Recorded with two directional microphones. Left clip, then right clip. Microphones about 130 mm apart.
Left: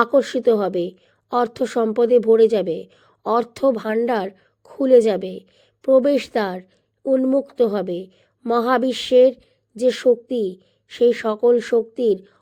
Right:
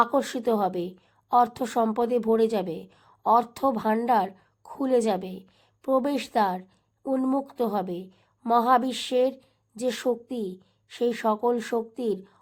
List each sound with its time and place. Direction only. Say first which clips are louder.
0.0 s a woman's voice: left 7 dB; 25° left (ahead or behind)